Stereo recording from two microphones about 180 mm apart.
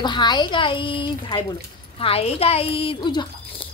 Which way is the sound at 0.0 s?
25° left (ahead or behind).